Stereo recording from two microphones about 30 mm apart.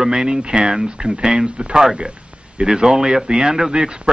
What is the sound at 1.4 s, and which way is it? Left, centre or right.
Speech, right.